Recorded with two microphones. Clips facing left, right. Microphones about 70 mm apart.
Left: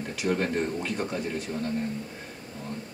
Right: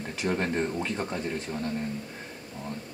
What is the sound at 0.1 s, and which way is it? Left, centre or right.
Speech, right.